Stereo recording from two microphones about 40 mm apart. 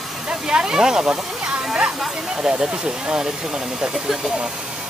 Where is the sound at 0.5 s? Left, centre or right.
Centre.